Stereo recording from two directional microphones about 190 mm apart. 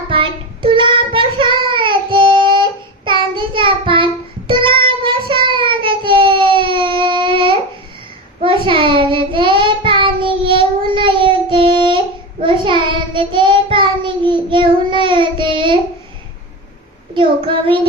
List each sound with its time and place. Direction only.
0.1 s child singing: 25° right (ahead or behind)
17.2 s child singing: 25° right (ahead or behind)